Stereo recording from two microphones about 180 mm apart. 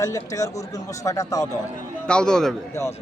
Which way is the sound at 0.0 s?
20° left (ahead or behind).